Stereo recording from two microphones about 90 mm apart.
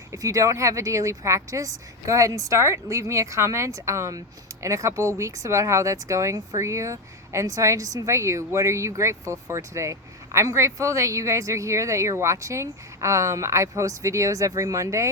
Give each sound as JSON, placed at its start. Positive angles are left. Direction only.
{"t": 0.1, "sound": "speech", "side_deg": -40}